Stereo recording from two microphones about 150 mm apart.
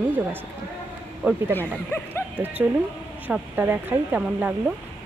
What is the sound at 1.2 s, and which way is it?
Speech, 10° right (ahead or behind).